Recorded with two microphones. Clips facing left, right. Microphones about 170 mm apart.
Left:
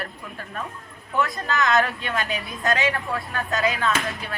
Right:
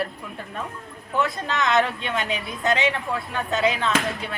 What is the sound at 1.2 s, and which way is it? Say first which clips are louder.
A woman's voice: left 1 dB; 20° right (ahead or behind).